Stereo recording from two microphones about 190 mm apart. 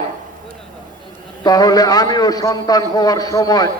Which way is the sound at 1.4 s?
20° left (ahead or behind).